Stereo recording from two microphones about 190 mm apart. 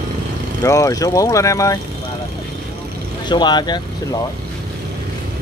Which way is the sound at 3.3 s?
25° left (ahead or behind).